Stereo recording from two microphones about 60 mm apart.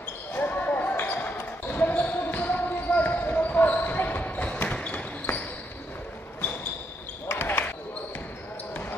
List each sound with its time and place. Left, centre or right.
0.3 s basketball bounce: left
7.3 s basketball bounce: left